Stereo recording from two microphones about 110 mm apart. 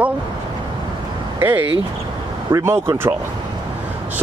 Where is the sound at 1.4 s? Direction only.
20° right (ahead or behind).